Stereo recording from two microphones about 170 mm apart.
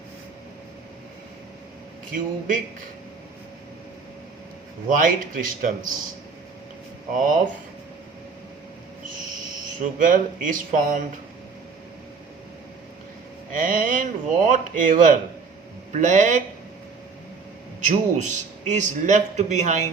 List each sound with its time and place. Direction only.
4.9 s a man's voice: 50° right (ahead or behind)
7.1 s a man's voice: 50° right (ahead or behind)
9.8 s a man's voice: 50° right (ahead or behind)
13.5 s a man's voice: 50° right (ahead or behind)
17.8 s a man's voice: 45° right (ahead or behind)